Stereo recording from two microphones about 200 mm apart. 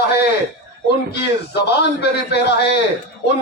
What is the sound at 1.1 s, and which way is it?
A man's voice, 55° left (ahead or behind).